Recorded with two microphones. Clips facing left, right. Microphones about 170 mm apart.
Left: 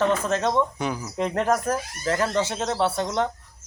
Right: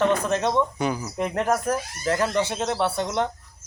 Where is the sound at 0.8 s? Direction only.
Centre (ahead or behind).